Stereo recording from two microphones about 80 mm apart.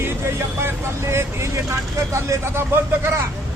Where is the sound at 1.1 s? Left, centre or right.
Right.